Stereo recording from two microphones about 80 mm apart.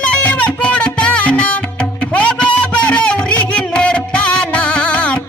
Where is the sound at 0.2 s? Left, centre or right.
Centre.